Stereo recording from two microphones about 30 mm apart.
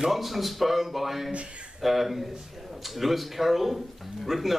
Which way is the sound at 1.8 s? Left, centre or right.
Centre.